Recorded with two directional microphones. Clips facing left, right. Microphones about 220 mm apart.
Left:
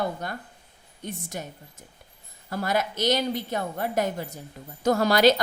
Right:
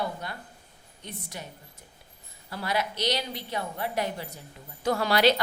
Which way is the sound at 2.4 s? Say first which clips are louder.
Left 4 dB; 45° left (ahead or behind).